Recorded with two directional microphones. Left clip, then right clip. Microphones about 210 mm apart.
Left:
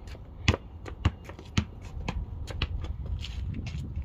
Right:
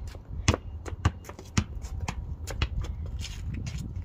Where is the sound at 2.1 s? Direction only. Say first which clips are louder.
Right 1 dB; 30° right (ahead or behind).